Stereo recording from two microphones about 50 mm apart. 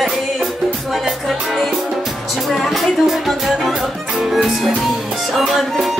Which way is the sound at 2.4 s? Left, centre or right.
Centre.